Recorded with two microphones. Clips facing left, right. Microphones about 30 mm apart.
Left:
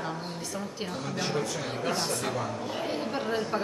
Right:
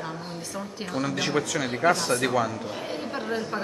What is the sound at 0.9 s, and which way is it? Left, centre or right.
Speech, right.